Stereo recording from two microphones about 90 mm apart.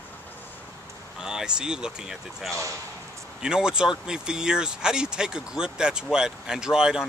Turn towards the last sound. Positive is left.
turn(degrees=-10)  # may be behind; listen again after turning